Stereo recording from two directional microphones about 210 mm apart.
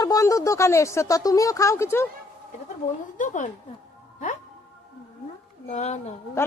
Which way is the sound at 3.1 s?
35° left (ahead or behind).